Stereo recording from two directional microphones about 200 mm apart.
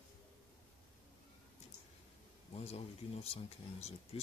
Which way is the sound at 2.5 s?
30° left (ahead or behind).